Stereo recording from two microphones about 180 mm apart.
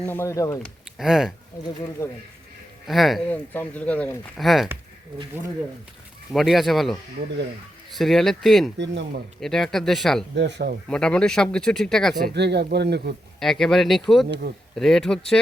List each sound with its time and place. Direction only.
0.0 s speech: 10° left (ahead or behind)
0.6 s speech: centre (ahead or behind)
2.0 s speech: 15° left (ahead or behind)
2.8 s speech: centre (ahead or behind)
3.2 s speech: 10° left (ahead or behind)
6.3 s speech: centre (ahead or behind)
8.8 s speech: 75° right (ahead or behind)
9.4 s speech: centre (ahead or behind)
10.3 s speech: 70° right (ahead or behind)
10.8 s speech: 5° left (ahead or behind)
12.1 s speech: 65° right (ahead or behind)
13.4 s speech: centre (ahead or behind)